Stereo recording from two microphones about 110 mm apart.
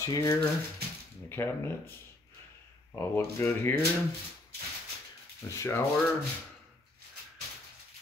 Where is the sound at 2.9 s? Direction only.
20° left (ahead or behind).